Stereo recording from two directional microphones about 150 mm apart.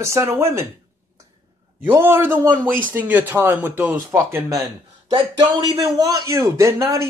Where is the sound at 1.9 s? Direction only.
15° right (ahead or behind).